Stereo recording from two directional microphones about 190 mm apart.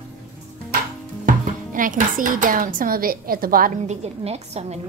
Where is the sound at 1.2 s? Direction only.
45° right (ahead or behind).